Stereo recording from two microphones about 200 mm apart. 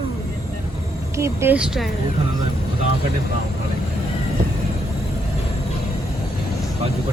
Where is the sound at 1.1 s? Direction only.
15° right (ahead or behind).